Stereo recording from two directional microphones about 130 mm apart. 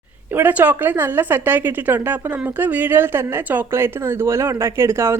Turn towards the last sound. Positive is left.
turn(degrees=-20)  # may be behind; listen again after turning